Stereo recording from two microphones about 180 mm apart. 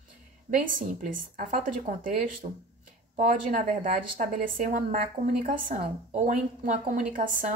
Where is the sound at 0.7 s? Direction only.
50° right (ahead or behind).